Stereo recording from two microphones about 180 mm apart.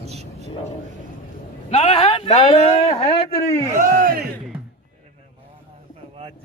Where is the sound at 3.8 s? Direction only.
55° right (ahead or behind).